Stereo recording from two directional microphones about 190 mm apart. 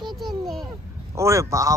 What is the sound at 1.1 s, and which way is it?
Speech, 15° right (ahead or behind).